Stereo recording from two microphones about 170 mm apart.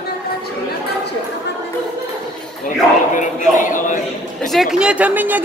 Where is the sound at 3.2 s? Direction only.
50° left (ahead or behind).